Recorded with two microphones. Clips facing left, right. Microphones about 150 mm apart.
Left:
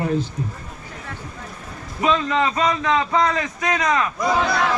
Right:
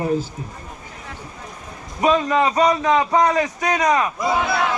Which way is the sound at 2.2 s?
35° right (ahead or behind).